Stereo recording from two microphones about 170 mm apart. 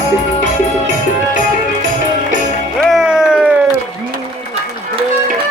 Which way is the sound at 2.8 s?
Centre (ahead or behind).